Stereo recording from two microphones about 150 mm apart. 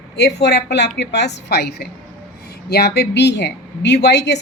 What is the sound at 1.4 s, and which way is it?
A woman's voice, 90° left.